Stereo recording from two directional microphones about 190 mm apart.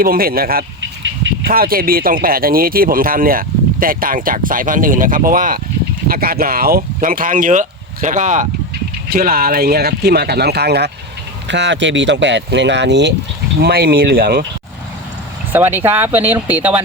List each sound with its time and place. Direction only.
0.0 s speech: 50° right (ahead or behind)
0.8 s vehicle: 75° right (ahead or behind)
1.5 s speech: 50° right (ahead or behind)
15.5 s speech: 10° right (ahead or behind)